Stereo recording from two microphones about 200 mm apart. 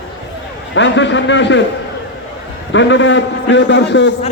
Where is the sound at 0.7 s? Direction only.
65° left (ahead or behind).